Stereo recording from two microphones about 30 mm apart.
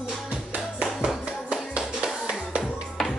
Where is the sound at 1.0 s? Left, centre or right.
Right.